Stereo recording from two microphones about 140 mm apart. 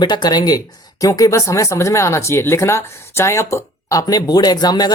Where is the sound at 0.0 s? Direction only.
30° left (ahead or behind).